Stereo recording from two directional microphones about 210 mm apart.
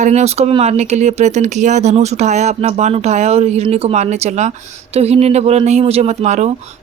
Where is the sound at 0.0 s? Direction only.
35° right (ahead or behind).